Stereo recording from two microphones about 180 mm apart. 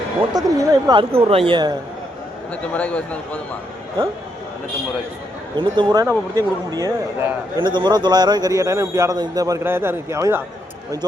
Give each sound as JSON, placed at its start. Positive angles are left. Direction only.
{"t": 0.3, "sound": "a man's voice", "side_deg": -20}
{"t": 1.1, "sound": "speech", "side_deg": -30}
{"t": 2.7, "sound": "a man's voice", "side_deg": 10}
{"t": 5.5, "sound": "a man's voice", "side_deg": -25}